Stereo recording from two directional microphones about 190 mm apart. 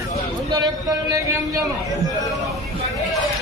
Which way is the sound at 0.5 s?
20° right (ahead or behind).